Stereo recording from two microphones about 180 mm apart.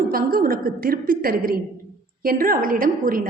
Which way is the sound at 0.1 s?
55° right (ahead or behind).